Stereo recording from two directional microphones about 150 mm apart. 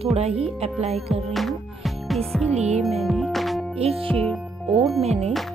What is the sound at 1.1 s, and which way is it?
Music, centre (ahead or behind).